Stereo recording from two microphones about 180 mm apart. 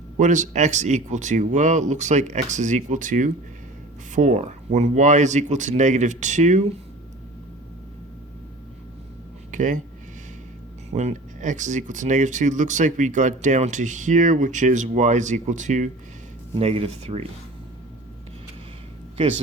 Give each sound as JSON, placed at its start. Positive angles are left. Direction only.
{"t": 0.2, "sound": "speech", "side_deg": -45}
{"t": 9.5, "sound": "speech", "side_deg": -45}
{"t": 10.9, "sound": "speech", "side_deg": -40}